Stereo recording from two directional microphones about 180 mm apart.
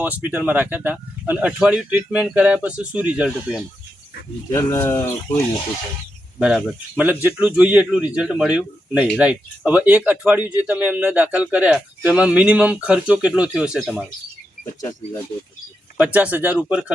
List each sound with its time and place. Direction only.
0.0 s speech: 10° right (ahead or behind)
4.5 s speech: 15° left (ahead or behind)
6.4 s speech: 5° right (ahead or behind)
14.8 s speech: 20° left (ahead or behind)
16.0 s speech: 10° right (ahead or behind)